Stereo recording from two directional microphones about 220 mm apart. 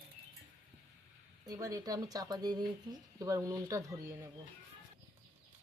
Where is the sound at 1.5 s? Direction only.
15° right (ahead or behind).